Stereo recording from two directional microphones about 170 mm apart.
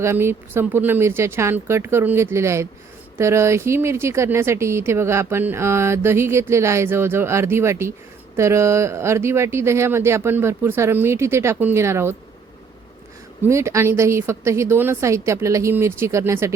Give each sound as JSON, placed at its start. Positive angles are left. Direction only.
{"t": 0.0, "sound": "speech", "side_deg": -15}
{"t": 13.4, "sound": "speech", "side_deg": -15}